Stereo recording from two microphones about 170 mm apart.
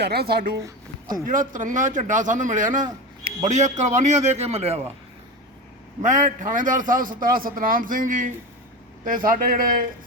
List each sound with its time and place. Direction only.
0.0 s speech: 70° right (ahead or behind)
0.6 s a sound: 25° right (ahead or behind)
1.3 s a man's voice: 50° right (ahead or behind)
6.0 s a man's voice: 45° right (ahead or behind)